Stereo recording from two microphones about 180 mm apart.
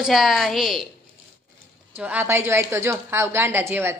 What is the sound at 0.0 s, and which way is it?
Speech, centre (ahead or behind).